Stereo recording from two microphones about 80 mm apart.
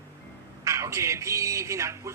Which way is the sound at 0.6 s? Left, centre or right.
Right.